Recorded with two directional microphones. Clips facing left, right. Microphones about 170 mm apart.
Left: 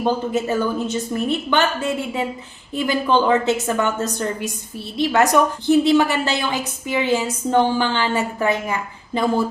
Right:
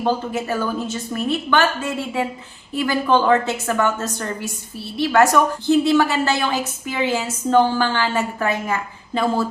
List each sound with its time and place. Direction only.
0.0 s a woman's voice: 20° left (ahead or behind)